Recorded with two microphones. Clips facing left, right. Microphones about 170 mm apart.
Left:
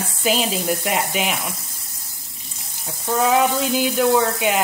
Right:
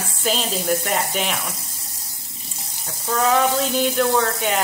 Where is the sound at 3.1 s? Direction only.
5° left (ahead or behind).